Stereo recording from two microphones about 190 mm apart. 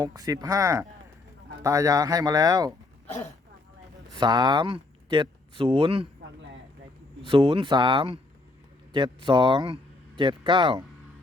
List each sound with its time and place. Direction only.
0.0 s speech: 20° right (ahead or behind)
4.2 s speech: 20° right (ahead or behind)
7.3 s speech: 25° right (ahead or behind)